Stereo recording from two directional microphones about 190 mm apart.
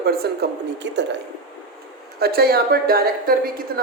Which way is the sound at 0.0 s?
55° right (ahead or behind).